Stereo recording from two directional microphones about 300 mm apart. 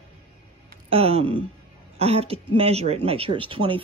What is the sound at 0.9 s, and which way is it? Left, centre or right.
Speech, centre.